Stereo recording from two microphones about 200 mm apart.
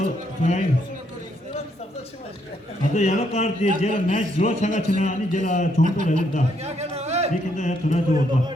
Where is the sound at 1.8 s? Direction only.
30° left (ahead or behind).